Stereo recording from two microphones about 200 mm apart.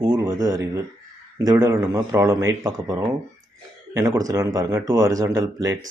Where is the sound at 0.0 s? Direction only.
15° right (ahead or behind).